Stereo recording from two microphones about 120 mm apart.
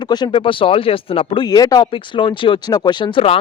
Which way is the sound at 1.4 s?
35° left (ahead or behind).